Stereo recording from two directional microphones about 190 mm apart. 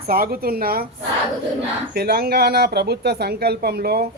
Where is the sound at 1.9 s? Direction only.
55° right (ahead or behind).